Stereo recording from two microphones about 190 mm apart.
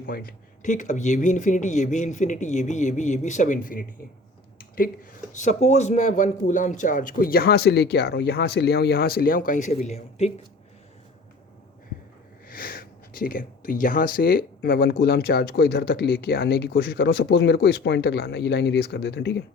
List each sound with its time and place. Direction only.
0.0 s speech: 50° left (ahead or behind)
4.5 s a sound: 50° left (ahead or behind)
5.4 s a man's voice: 35° left (ahead or behind)
12.5 s speech: 50° left (ahead or behind)